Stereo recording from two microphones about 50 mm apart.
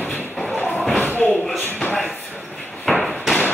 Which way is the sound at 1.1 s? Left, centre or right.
Left.